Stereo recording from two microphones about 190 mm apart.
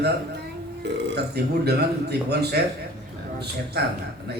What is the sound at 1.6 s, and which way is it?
Speech, 60° right (ahead or behind).